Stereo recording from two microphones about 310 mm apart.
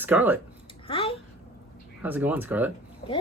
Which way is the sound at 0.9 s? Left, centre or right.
Centre.